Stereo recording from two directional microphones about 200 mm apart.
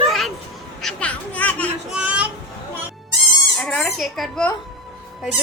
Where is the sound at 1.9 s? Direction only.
5° right (ahead or behind).